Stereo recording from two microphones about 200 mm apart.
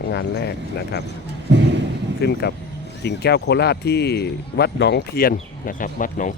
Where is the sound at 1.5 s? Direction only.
60° right (ahead or behind).